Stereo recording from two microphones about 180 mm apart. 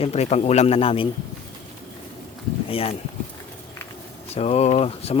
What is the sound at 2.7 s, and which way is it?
Speech, 30° left (ahead or behind).